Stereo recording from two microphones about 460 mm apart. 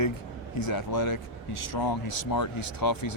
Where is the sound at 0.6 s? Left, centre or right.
Left.